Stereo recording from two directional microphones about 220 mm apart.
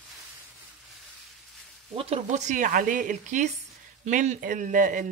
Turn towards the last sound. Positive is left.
turn(degrees=-35)  # may be behind; listen again after turning